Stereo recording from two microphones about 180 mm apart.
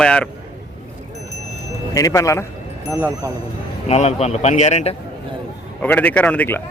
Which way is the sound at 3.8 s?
35° left (ahead or behind).